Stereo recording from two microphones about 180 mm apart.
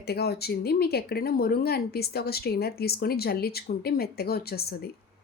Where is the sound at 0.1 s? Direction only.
60° left (ahead or behind).